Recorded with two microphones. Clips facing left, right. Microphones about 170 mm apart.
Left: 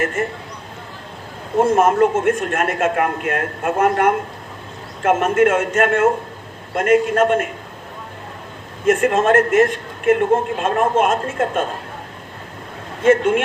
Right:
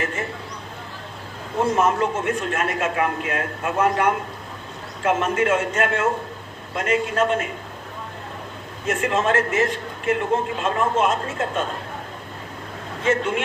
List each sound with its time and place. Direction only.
0.0 s a man's voice: 50° left (ahead or behind)
1.5 s a man's voice: 50° left (ahead or behind)
8.9 s a man's voice: 50° left (ahead or behind)
13.1 s a man's voice: 50° left (ahead or behind)